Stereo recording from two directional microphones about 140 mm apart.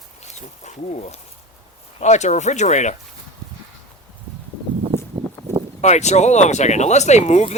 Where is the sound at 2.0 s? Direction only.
55° left (ahead or behind).